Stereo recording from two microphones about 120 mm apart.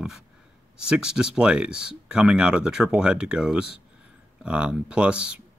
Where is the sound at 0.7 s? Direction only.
5° right (ahead or behind).